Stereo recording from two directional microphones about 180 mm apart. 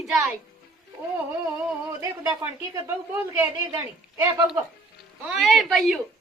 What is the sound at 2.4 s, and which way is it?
A woman's voice, 15° right (ahead or behind).